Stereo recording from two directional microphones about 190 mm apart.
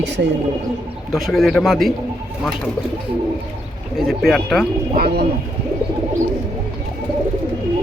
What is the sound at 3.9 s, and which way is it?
Speech, centre (ahead or behind).